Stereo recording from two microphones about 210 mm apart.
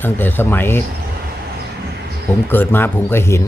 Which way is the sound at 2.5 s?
10° left (ahead or behind).